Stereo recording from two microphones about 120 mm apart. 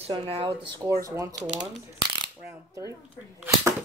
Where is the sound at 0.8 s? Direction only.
25° right (ahead or behind).